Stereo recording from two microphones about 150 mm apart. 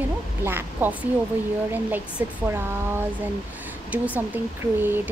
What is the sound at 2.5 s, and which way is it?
Speech, 15° right (ahead or behind).